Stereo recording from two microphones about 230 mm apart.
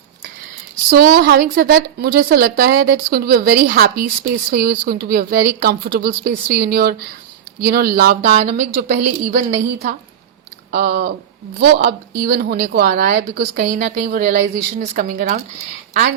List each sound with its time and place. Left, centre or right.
0.9 s a woman's voice: right
10.7 s a woman's voice: right